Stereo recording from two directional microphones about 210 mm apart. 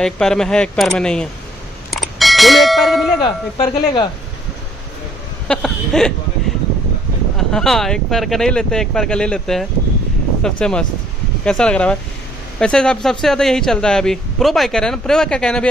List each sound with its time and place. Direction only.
0.0 s speech: 5° left (ahead or behind)
1.9 s ding: centre (ahead or behind)
3.2 s speech: 20° left (ahead or behind)
5.5 s speech: 5° left (ahead or behind)
7.3 s speech: centre (ahead or behind)